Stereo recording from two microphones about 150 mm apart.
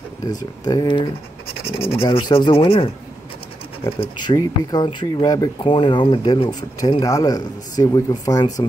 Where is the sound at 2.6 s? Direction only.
40° left (ahead or behind).